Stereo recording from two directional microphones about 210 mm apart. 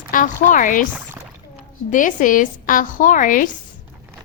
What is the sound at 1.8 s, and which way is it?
A woman's voice, 40° left (ahead or behind).